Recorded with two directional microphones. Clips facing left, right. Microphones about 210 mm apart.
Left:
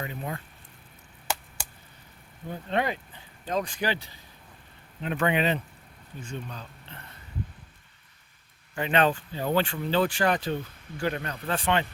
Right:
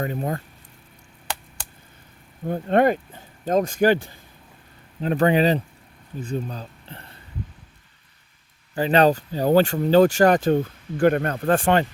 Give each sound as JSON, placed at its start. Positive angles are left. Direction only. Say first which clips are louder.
{"t": 0.0, "sound": "speech", "louder": "right 8 dB", "side_deg": -45}
{"t": 2.5, "sound": "speech", "louder": "right 10 dB", "side_deg": -50}
{"t": 4.9, "sound": "speech", "louder": "right 7 dB", "side_deg": -35}
{"t": 8.7, "sound": "speech", "louder": "right 7 dB", "side_deg": -35}